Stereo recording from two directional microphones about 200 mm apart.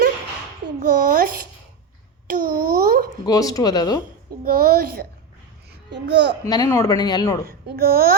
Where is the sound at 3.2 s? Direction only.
20° left (ahead or behind).